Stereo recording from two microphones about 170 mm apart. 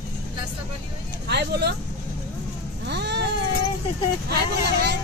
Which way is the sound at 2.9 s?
85° right.